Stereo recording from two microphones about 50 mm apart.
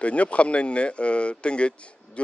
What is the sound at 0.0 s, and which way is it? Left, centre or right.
A man's voice, left.